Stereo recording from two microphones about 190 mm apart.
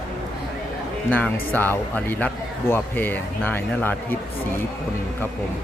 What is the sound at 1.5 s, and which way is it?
Speech, 10° left (ahead or behind).